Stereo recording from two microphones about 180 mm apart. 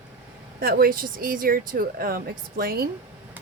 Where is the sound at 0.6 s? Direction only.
55° right (ahead or behind).